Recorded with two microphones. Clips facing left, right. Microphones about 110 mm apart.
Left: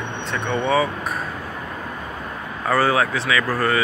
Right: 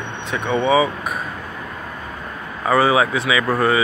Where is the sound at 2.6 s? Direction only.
10° right (ahead or behind).